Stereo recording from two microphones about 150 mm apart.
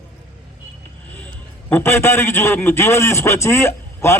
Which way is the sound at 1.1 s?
10° left (ahead or behind).